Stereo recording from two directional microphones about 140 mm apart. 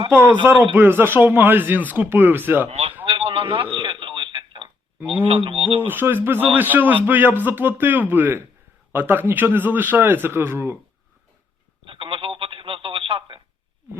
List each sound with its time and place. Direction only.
0.1 s a man's voice: 15° right (ahead or behind)
2.6 s speech: 45° right (ahead or behind)
3.0 s a sound: 40° right (ahead or behind)
3.8 s telephone: 35° right (ahead or behind)
5.0 s speech: 40° right (ahead or behind)
5.8 s a man's voice: 15° right (ahead or behind)
11.9 s telephone: 40° right (ahead or behind)